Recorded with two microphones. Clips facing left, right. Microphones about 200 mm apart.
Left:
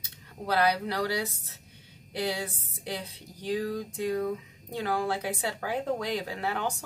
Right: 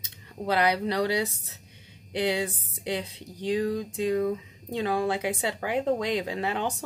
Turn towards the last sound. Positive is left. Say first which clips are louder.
# right 3 dB
turn(degrees=-20)  # may be behind; listen again after turning